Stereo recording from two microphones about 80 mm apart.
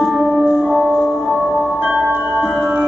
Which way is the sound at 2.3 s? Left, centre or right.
Centre.